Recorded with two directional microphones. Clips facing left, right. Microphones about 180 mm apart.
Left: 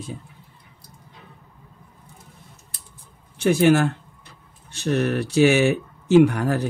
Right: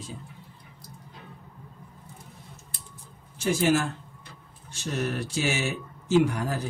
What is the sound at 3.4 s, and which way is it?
Speech, 65° left (ahead or behind).